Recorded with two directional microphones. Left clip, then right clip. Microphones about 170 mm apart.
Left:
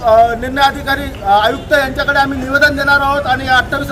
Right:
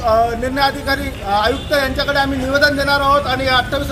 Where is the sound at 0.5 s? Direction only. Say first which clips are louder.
Left 4 dB; 30° left (ahead or behind).